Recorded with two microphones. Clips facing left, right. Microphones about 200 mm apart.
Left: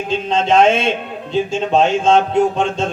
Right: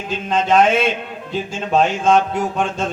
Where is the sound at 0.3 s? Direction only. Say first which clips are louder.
Left 2 dB; 25° left (ahead or behind).